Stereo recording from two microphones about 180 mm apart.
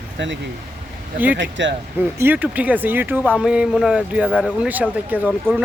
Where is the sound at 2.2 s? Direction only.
10° right (ahead or behind).